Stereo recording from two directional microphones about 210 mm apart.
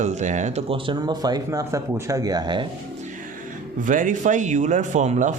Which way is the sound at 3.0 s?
40° right (ahead or behind).